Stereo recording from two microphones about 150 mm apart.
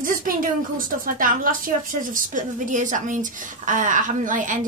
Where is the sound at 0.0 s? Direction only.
65° right (ahead or behind).